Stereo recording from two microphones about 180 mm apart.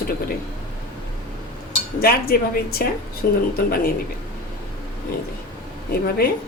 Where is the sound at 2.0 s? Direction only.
55° left (ahead or behind).